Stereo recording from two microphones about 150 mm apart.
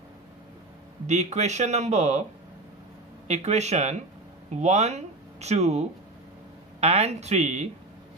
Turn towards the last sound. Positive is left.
turn(degrees=-45)  # may be behind; listen again after turning